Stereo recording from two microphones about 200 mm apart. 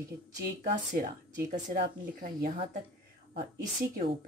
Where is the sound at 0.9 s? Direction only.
40° right (ahead or behind).